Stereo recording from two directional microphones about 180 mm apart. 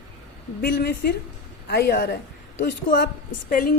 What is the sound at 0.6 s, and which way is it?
A woman's voice, 60° left (ahead or behind).